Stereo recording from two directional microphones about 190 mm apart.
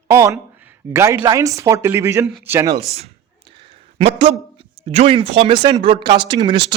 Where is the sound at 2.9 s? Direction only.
30° right (ahead or behind).